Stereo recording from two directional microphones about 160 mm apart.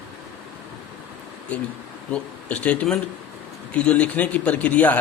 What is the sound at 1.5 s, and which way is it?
A man's voice, 10° left (ahead or behind).